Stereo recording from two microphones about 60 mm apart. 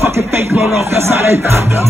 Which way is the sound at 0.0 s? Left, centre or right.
Right.